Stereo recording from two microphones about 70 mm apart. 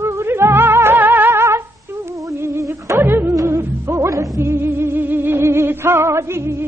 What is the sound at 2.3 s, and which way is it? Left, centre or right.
Music, right.